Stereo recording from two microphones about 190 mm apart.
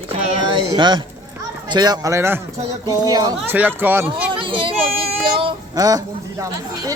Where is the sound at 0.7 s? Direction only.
25° right (ahead or behind).